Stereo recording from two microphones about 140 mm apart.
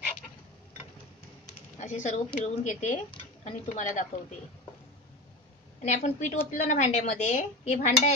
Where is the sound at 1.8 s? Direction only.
60° left (ahead or behind).